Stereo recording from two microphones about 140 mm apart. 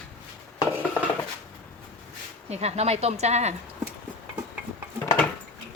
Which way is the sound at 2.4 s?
50° right (ahead or behind).